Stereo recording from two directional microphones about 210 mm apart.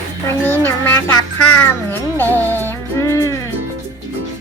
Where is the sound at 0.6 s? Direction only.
10° left (ahead or behind).